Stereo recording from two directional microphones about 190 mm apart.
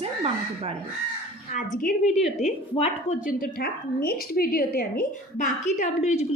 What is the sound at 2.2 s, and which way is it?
Speech, centre (ahead or behind).